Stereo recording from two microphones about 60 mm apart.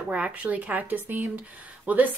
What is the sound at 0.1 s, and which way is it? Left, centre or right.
A woman's voice, right.